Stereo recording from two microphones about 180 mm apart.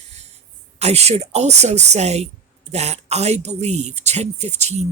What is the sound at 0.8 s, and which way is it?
Speech, 35° right (ahead or behind).